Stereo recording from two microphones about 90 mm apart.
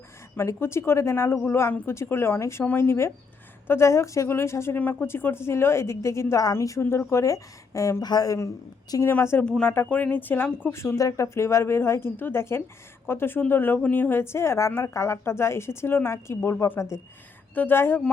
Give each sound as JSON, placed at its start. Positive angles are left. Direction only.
{"t": 0.3, "sound": "speech", "side_deg": 30}
{"t": 8.0, "sound": "speech", "side_deg": 45}
{"t": 9.0, "sound": "speech", "side_deg": 25}
{"t": 9.4, "sound": "speech", "side_deg": 15}